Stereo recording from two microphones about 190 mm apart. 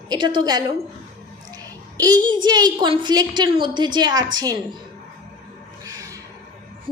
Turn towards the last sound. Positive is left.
turn(degrees=-15)  # may be behind; listen again after turning